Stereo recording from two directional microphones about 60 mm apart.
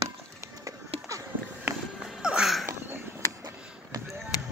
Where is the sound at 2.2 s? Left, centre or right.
Centre.